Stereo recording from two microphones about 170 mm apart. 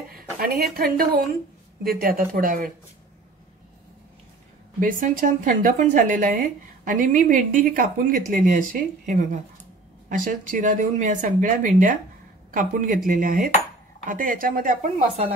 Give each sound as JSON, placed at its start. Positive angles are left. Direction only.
{"t": 0.1, "sound": "speech", "side_deg": -60}
{"t": 4.7, "sound": "a woman's voice", "side_deg": -50}